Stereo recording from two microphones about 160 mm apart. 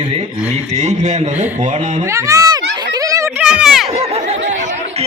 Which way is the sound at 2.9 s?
20° right (ahead or behind).